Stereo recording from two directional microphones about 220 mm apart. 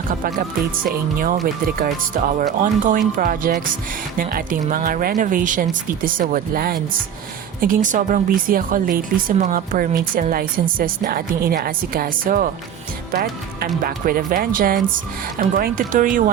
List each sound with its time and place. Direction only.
1.6 s a woman's voice: 40° right (ahead or behind)